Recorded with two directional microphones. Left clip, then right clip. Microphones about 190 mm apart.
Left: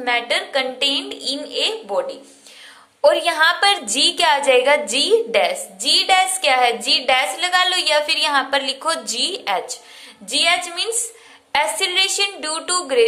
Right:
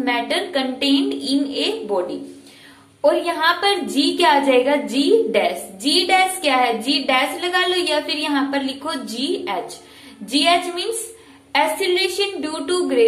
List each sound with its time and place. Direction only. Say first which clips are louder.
0.0 s a woman's voice: left 1 dB; 25° left (ahead or behind)